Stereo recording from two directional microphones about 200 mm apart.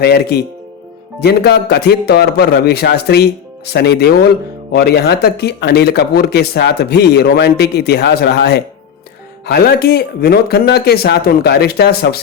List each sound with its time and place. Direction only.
0.0 s speech: 55° left (ahead or behind)